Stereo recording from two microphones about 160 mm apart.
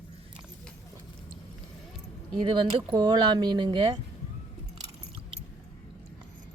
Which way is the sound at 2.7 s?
30° right (ahead or behind).